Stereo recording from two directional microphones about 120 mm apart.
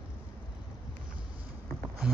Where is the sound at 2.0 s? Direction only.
5° right (ahead or behind).